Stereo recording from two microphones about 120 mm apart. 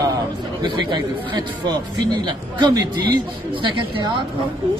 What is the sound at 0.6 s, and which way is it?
A man's voice, 40° right (ahead or behind).